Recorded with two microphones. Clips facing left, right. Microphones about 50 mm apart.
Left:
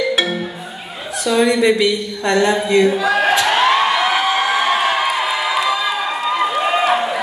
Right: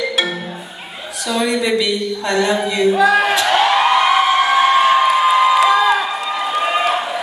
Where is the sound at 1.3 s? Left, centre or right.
Left.